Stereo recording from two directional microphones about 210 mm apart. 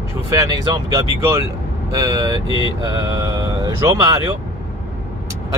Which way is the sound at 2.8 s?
20° right (ahead or behind).